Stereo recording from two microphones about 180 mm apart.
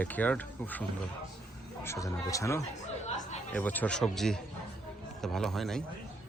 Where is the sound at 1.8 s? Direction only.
15° left (ahead or behind).